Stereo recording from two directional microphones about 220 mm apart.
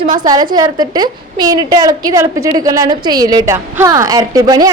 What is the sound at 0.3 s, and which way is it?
A woman's voice, 15° right (ahead or behind).